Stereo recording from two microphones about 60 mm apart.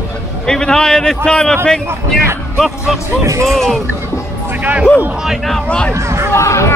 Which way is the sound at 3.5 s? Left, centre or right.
Centre.